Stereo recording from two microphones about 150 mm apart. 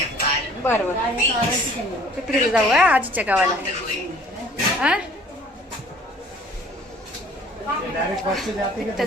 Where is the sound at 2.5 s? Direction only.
5° right (ahead or behind).